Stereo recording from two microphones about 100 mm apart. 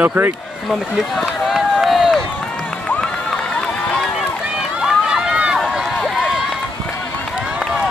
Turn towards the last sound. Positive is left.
turn(degrees=5)  # may be behind; listen again after turning